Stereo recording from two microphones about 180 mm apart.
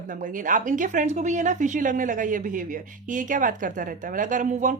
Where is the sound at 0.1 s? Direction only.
45° right (ahead or behind).